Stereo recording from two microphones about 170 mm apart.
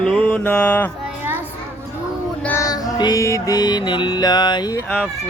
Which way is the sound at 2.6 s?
20° left (ahead or behind).